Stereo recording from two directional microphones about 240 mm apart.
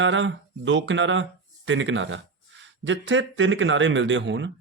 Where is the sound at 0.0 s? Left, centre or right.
Right.